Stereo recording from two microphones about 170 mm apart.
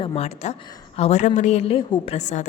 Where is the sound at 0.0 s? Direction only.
35° left (ahead or behind).